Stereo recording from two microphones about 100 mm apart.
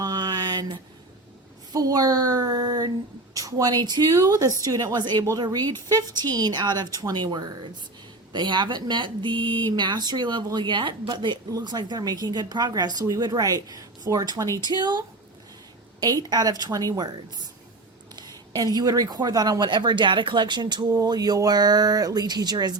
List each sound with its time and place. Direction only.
0.0 s a sound: 45° right (ahead or behind)
1.7 s a woman's voice: 40° right (ahead or behind)
18.2 s speech: 40° right (ahead or behind)